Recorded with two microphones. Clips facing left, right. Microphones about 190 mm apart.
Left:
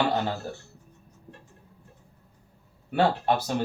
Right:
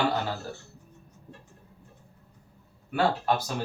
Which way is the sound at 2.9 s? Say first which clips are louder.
Left 2 dB; 25° left (ahead or behind).